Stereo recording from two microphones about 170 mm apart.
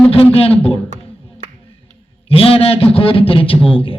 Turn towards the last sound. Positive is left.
turn(degrees=30)  # may be behind; listen again after turning